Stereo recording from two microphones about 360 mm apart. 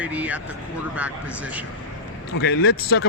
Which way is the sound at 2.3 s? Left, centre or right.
Left.